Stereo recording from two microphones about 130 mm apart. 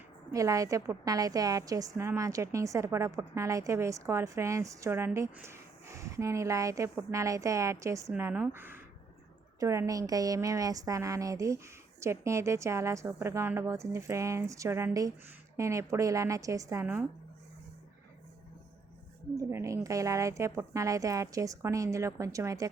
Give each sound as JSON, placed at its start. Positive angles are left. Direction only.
{"t": 0.3, "sound": "a woman's voice", "side_deg": -25}
{"t": 19.4, "sound": "a woman's voice", "side_deg": -20}